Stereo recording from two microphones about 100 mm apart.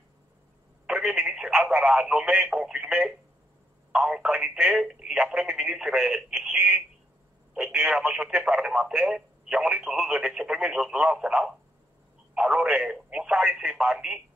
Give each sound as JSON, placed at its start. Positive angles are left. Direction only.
{"t": 0.8, "sound": "speech", "side_deg": -10}